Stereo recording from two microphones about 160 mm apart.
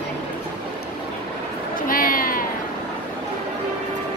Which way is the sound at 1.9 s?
65° left (ahead or behind).